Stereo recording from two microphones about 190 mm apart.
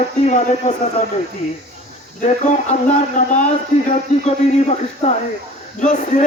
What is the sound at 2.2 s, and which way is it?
Speech, 40° left (ahead or behind).